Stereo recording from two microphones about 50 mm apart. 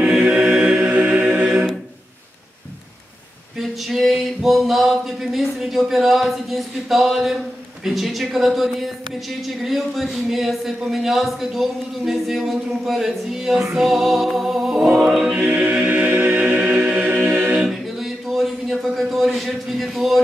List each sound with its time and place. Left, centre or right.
0.2 s a capella: right
0.7 s music: right
3.5 s a sound: centre
7.8 s speech: centre
15.0 s choir: centre
15.3 s choir: right
17.0 s music: right
17.4 s a capella: right
17.6 s a sound: centre